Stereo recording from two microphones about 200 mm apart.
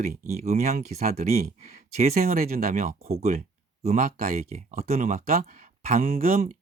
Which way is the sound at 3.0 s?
30° right (ahead or behind).